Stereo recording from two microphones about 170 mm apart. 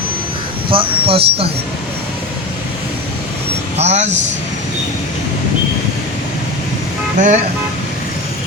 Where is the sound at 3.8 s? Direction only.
40° right (ahead or behind).